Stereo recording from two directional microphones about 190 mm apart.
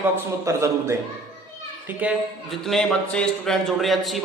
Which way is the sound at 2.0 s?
10° right (ahead or behind).